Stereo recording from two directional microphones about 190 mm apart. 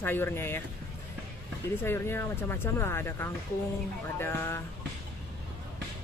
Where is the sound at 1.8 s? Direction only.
10° left (ahead or behind).